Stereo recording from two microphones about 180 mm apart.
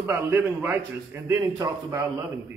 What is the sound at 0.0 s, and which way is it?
A man's voice, 15° right (ahead or behind).